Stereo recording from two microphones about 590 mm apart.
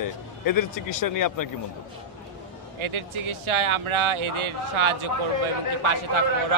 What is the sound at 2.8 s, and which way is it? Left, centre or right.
Speech, right.